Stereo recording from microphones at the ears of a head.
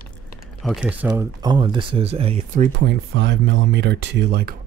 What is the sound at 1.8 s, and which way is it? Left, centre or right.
Speech, right.